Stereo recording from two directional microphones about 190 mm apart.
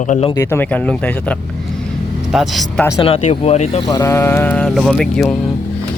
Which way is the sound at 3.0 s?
30° left (ahead or behind).